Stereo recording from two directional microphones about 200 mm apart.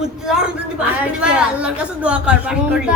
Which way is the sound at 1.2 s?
5° right (ahead or behind).